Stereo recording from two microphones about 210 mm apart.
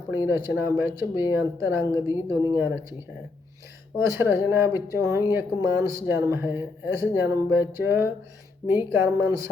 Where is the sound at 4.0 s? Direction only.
10° right (ahead or behind).